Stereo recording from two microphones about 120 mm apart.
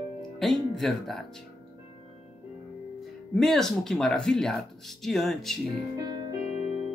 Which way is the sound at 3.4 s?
5° left (ahead or behind).